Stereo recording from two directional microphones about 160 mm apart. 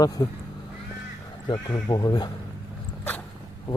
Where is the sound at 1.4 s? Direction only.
25° left (ahead or behind).